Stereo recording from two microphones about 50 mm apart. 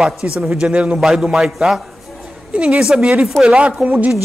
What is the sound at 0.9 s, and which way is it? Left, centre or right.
Speech, centre.